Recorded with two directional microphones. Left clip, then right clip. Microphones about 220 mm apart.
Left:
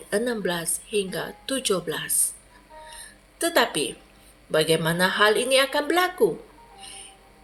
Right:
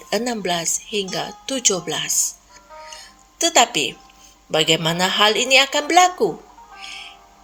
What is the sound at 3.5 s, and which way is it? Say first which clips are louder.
A woman's voice: right 6 dB; 35° right (ahead or behind).